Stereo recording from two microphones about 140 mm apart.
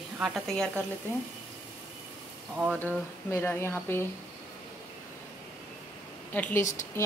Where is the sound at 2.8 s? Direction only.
15° left (ahead or behind).